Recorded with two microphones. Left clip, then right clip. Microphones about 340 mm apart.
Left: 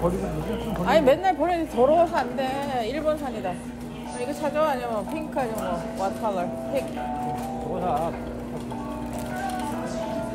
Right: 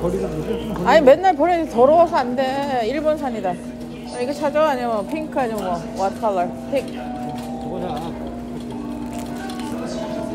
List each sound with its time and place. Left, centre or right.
0.8 s speech: right
4.2 s speech: right